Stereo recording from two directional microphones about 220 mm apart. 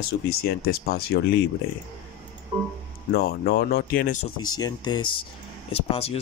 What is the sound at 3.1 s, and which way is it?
Speech, 45° left (ahead or behind).